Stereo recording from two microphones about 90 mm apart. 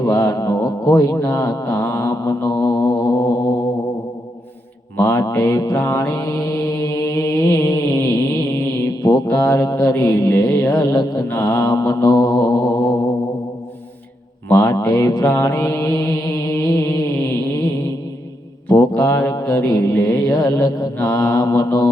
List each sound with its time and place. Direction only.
0.0 s mantra: 40° left (ahead or behind)
4.9 s a sound: 35° left (ahead or behind)
5.3 s mantra: 40° left (ahead or behind)
14.5 s mantra: 35° left (ahead or behind)
18.7 s mantra: 35° left (ahead or behind)